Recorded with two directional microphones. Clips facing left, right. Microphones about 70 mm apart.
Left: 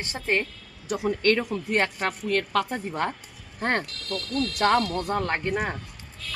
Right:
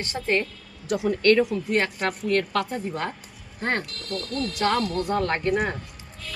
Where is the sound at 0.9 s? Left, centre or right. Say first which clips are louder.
Right 4 dB; left.